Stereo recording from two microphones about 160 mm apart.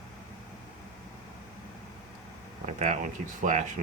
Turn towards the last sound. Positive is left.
turn(degrees=-50)  # may be behind; listen again after turning